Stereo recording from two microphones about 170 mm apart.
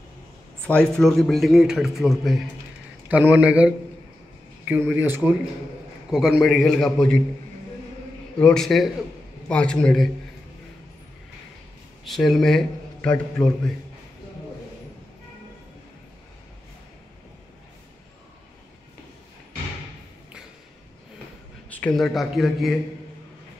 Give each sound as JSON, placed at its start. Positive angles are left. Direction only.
{"t": 0.7, "sound": "a man's voice", "side_deg": 5}
{"t": 8.4, "sound": "a man's voice", "side_deg": 5}
{"t": 12.1, "sound": "a man's voice", "side_deg": 0}
{"t": 21.7, "sound": "a man's voice", "side_deg": 5}